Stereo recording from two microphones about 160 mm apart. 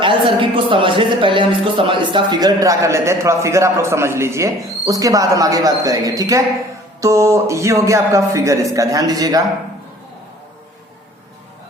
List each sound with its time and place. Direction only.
0.0 s speech: 30° right (ahead or behind)